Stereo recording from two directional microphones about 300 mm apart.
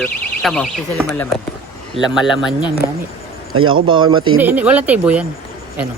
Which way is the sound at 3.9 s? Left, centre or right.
Centre.